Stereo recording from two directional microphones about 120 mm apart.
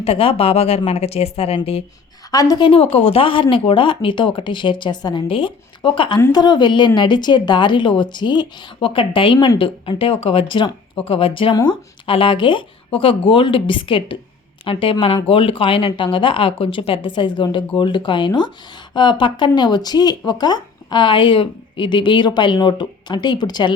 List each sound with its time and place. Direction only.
0.0 s speech: 50° left (ahead or behind)
2.3 s speech: 30° left (ahead or behind)
2.6 s a woman's voice: 50° left (ahead or behind)